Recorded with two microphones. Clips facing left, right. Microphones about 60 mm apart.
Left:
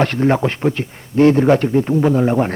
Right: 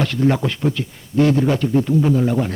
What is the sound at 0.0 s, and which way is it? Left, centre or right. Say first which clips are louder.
Speech: left 3 dB; left.